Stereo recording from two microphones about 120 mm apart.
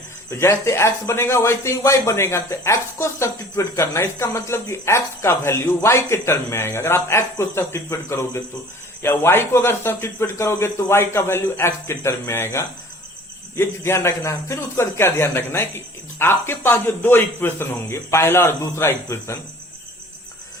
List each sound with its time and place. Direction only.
0.3 s speech: 20° left (ahead or behind)